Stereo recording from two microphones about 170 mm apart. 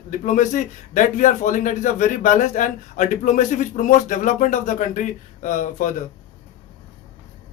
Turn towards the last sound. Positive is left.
turn(degrees=50)  # may be behind; listen again after turning